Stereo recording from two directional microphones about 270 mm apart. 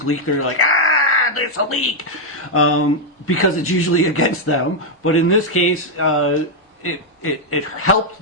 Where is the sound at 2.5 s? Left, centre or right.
Left.